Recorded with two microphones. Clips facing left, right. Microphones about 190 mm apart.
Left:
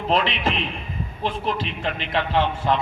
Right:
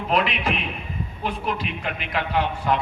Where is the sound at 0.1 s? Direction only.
25° left (ahead or behind).